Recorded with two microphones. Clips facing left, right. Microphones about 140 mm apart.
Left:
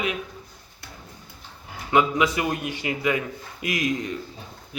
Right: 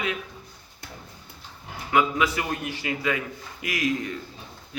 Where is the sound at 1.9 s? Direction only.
20° left (ahead or behind).